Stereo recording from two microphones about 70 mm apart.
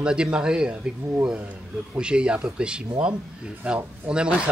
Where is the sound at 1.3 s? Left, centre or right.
Right.